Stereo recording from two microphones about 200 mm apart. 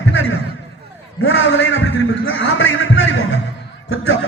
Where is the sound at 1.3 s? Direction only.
75° left (ahead or behind).